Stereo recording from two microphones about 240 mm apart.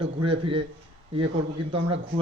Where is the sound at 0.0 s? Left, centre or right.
Right.